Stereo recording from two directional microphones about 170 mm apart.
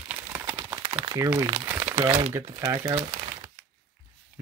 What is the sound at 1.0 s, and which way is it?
Speech, 20° right (ahead or behind).